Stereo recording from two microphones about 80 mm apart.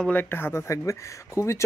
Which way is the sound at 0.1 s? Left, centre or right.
Left.